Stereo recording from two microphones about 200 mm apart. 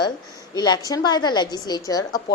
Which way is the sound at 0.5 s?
20° left (ahead or behind).